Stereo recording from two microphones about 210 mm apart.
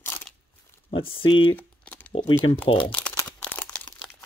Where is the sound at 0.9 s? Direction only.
25° left (ahead or behind).